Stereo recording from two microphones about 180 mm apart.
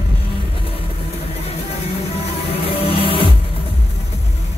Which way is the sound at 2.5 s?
30° left (ahead or behind).